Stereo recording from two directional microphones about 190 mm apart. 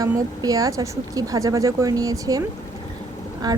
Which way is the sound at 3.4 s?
20° right (ahead or behind).